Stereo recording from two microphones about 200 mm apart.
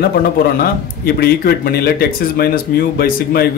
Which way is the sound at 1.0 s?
50° left (ahead or behind).